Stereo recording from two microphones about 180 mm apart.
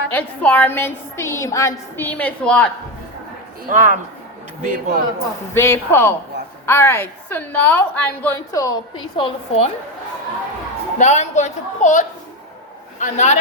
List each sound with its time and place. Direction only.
0.1 s a woman's voice: 10° left (ahead or behind)
3.7 s speech: 45° right (ahead or behind)
5.5 s a woman's voice: 15° left (ahead or behind)
8.5 s a woman's voice: 20° left (ahead or behind); by 9.7 s 35° left (ahead or behind)
10.9 s a woman's voice: 40° left (ahead or behind)